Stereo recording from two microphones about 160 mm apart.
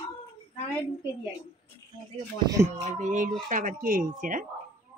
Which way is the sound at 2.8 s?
50° right (ahead or behind).